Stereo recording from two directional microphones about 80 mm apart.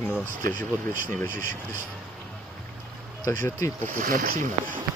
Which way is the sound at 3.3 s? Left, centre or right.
Left.